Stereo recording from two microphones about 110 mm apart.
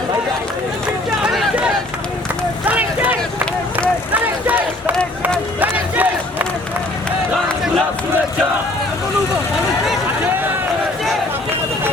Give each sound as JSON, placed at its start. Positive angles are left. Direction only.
{"t": 1.2, "sound": "a sound", "side_deg": -5}
{"t": 2.6, "sound": "vehicle", "side_deg": -15}
{"t": 5.5, "sound": "crowd", "side_deg": -15}